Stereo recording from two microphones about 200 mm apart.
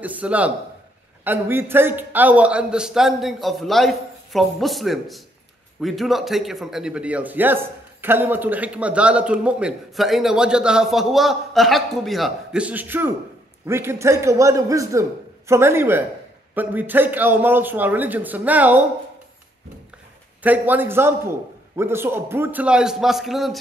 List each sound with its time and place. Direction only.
0.0 s a man's voice: 5° right (ahead or behind)
20.4 s a man's voice: 10° right (ahead or behind)